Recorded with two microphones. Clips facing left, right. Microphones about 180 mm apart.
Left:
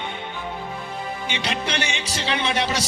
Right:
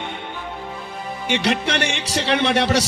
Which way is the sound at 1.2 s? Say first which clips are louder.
Right 8 dB; 70° right (ahead or behind).